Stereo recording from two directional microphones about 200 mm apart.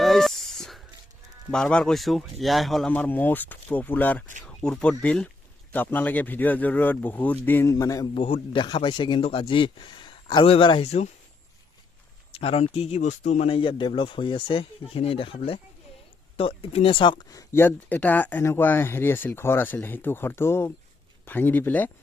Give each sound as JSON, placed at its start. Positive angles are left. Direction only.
{"t": 0.0, "sound": "a sound", "side_deg": 0}
{"t": 1.5, "sound": "speech", "side_deg": 5}
{"t": 12.3, "sound": "speech", "side_deg": 30}